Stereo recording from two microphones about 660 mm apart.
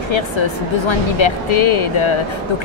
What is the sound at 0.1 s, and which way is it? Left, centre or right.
Speech, left.